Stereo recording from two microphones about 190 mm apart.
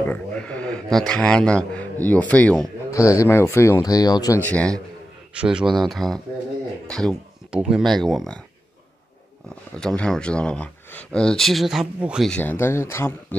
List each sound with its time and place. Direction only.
0.0 s a man's voice: 10° left (ahead or behind)
2.9 s a man's voice: 15° left (ahead or behind)
4.4 s a man's voice: 5° left (ahead or behind)
5.3 s speech: 5° right (ahead or behind)
9.8 s speech: 5° left (ahead or behind)